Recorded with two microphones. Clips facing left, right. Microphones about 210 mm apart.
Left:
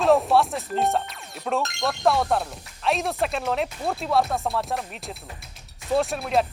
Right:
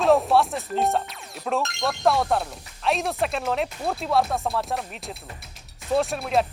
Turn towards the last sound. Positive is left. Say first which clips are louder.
# even
turn(degrees=0)  # may be behind; listen again after turning